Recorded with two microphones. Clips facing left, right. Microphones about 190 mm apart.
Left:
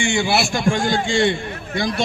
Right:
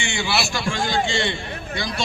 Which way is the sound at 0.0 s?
50° left (ahead or behind).